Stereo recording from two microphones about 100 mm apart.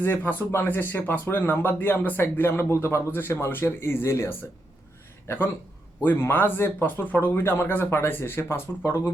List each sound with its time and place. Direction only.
0.0 s speech: 15° left (ahead or behind)
6.0 s speech: 20° left (ahead or behind)